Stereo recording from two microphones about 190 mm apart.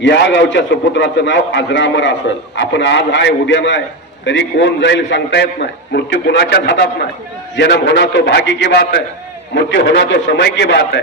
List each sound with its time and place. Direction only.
0.0 s a man's voice: 65° left (ahead or behind)
5.9 s a man's voice: 55° left (ahead or behind)